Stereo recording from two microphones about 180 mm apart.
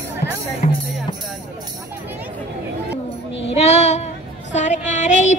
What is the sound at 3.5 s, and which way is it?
Child singing, 35° left (ahead or behind).